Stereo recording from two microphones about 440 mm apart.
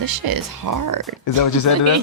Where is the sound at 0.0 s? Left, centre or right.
Right.